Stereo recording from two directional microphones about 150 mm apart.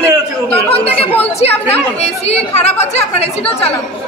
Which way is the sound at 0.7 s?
40° left (ahead or behind).